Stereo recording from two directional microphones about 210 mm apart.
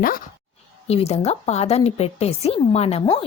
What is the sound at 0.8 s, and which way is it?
A woman's voice, 30° left (ahead or behind).